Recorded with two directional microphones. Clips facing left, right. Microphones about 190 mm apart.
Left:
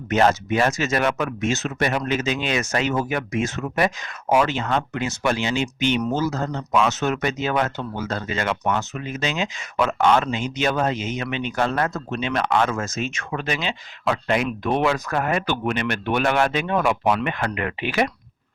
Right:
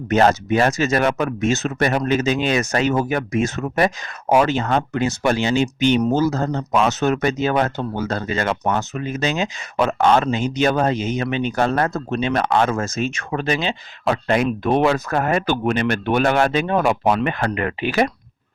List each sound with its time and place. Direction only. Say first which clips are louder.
0.1 s speech: right 3 dB; 40° right (ahead or behind)